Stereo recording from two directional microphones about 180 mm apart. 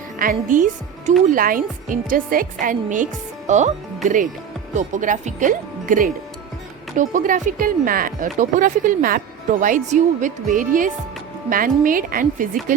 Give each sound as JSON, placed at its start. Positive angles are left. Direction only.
{"t": 0.2, "sound": "a woman's voice", "side_deg": -50}